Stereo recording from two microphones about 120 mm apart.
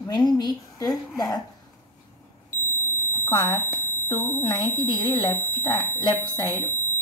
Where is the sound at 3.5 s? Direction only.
20° left (ahead or behind).